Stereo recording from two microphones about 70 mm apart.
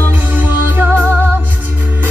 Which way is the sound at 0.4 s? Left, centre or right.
Right.